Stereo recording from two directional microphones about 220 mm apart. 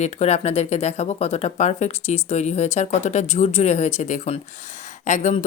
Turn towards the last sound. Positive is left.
turn(degrees=35)  # may be behind; listen again after turning